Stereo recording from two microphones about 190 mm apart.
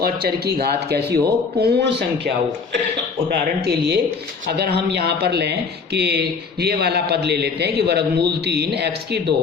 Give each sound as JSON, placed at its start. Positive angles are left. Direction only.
{"t": 0.0, "sound": "speech", "side_deg": -55}